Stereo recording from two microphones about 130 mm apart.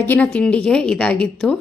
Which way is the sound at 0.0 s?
15° left (ahead or behind).